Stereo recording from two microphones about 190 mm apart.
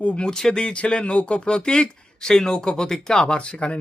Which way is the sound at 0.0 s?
5° left (ahead or behind).